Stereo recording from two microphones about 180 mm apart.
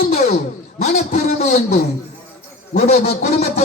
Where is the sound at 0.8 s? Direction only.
35° left (ahead or behind).